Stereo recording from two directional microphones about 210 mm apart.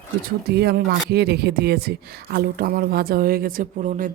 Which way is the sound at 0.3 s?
50° right (ahead or behind).